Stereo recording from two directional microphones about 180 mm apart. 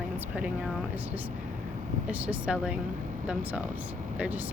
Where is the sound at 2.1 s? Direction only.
10° right (ahead or behind).